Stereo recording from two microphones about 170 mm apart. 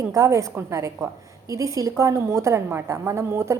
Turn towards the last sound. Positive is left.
turn(degrees=-15)  # may be behind; listen again after turning